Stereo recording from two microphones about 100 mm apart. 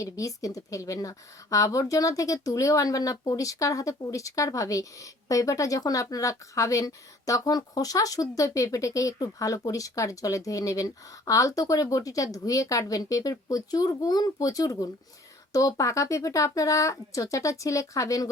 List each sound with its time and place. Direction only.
0.0 s a woman's voice: 35° left (ahead or behind)